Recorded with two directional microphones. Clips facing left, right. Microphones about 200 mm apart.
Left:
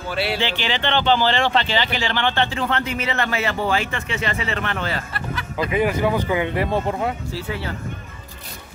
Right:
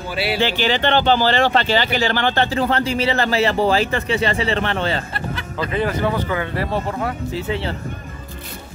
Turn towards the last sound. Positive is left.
turn(degrees=-25)  # may be behind; listen again after turning